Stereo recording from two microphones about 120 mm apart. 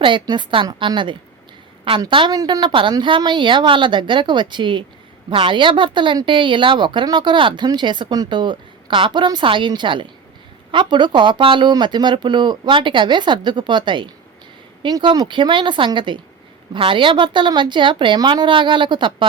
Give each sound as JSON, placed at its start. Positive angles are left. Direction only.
{"t": 0.0, "sound": "a woman's voice", "side_deg": -40}